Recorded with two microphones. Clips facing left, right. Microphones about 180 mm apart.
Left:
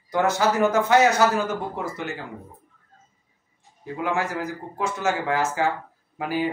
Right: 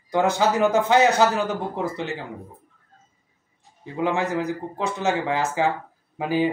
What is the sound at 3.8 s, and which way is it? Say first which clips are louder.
A man's voice: right 2 dB; 20° right (ahead or behind).